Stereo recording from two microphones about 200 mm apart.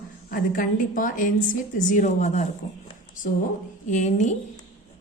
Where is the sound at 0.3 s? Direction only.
45° left (ahead or behind).